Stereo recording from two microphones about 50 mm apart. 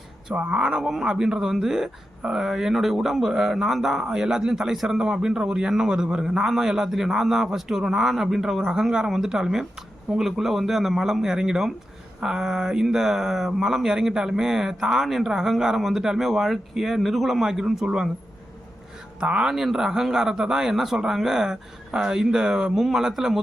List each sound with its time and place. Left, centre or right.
0.3 s speech: right
0.8 s speech: centre
19.2 s speech: centre
19.5 s speech: centre